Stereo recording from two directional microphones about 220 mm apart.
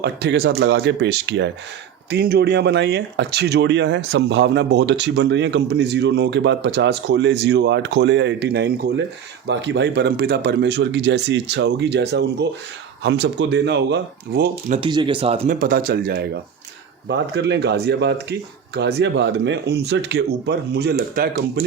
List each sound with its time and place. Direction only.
0.0 s speech: 50° right (ahead or behind)
14.7 s speech: 20° right (ahead or behind)
15.5 s speech: 40° right (ahead or behind)